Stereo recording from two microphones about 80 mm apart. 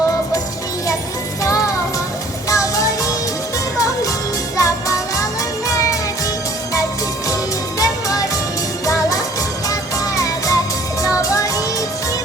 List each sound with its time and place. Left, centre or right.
2.5 s music: left
4.5 s music: left
10.2 s music: left